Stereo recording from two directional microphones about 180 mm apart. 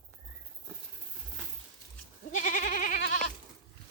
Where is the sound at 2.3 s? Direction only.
45° left (ahead or behind).